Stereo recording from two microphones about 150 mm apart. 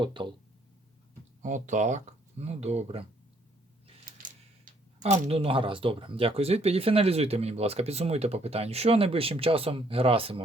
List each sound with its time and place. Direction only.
0.0 s speech: 30° right (ahead or behind)
1.4 s speech: 55° right (ahead or behind)
4.2 s speech: 60° right (ahead or behind); by 10.4 s 40° right (ahead or behind)